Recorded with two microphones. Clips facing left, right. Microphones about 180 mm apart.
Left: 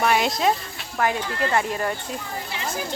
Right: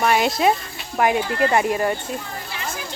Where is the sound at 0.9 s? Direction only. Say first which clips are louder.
Right 5 dB; 15° right (ahead or behind).